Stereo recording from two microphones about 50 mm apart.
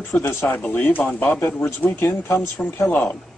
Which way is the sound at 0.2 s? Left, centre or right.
Left.